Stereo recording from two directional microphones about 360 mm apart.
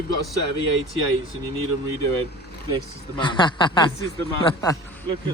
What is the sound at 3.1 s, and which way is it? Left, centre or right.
Speech, centre.